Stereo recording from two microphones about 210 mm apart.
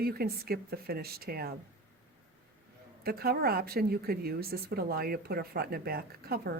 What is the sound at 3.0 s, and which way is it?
Speech, 45° right (ahead or behind).